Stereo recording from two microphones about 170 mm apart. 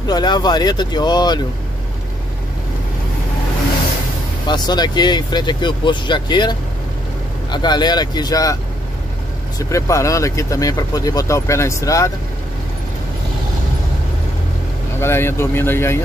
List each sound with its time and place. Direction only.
0.0 s speech: 25° left (ahead or behind)
4.5 s speech: 25° left (ahead or behind)
7.5 s speech: 25° left (ahead or behind)
9.6 s speech: 20° left (ahead or behind)
15.0 s speech: 15° left (ahead or behind)